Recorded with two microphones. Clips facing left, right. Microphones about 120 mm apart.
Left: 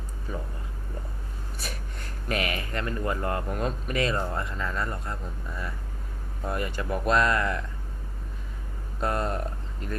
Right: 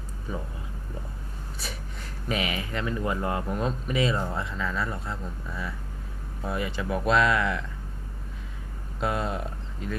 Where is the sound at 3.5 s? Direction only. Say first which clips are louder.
Right 1 dB; centre (ahead or behind).